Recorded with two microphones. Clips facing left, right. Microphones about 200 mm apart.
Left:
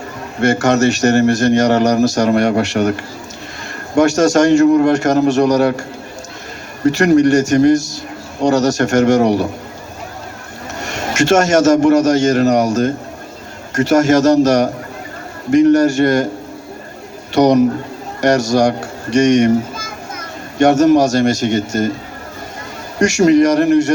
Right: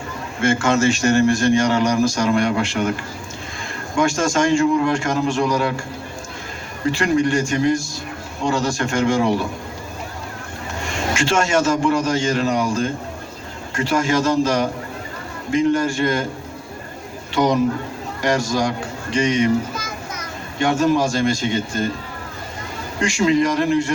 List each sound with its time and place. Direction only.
0.3 s speech: 40° left (ahead or behind)
4.1 s a man's voice: 40° left (ahead or behind)
6.8 s a man's voice: 45° left (ahead or behind)
10.8 s a man's voice: 40° left (ahead or behind)
13.9 s a man's voice: 45° left (ahead or behind)
17.3 s a man's voice: 70° left (ahead or behind)
18.2 s a man's voice: 45° left (ahead or behind)
20.1 s children playing: 45° left (ahead or behind)
21.4 s a man's voice: 45° left (ahead or behind)
23.2 s a man's voice: 45° left (ahead or behind)